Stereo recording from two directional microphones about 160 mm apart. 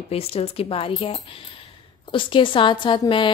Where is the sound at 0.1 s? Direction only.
40° left (ahead or behind).